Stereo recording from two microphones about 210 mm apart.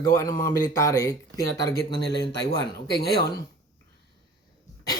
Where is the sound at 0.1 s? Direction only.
15° left (ahead or behind).